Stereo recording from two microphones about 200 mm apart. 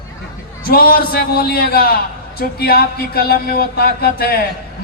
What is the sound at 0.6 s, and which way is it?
A man's voice, 50° left (ahead or behind).